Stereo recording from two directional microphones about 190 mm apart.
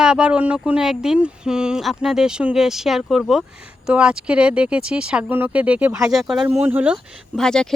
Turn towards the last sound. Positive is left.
turn(degrees=5)  # may be behind; listen again after turning